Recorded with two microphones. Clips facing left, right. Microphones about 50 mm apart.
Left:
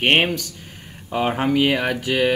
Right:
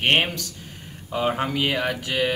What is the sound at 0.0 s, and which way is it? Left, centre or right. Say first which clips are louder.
Speech: left 3 dB; centre.